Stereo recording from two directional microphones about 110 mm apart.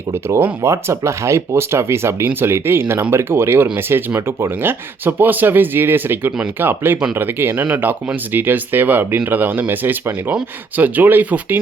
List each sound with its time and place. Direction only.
0.1 s speech: 20° right (ahead or behind)